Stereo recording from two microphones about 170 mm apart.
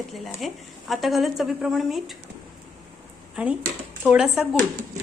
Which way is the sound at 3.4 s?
5° right (ahead or behind).